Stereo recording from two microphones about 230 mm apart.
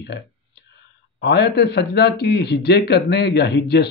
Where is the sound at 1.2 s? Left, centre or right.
Left.